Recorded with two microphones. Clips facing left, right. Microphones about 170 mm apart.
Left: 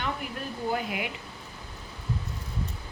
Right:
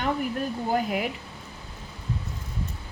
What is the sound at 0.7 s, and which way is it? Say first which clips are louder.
Speech: right 8 dB; 40° right (ahead or behind).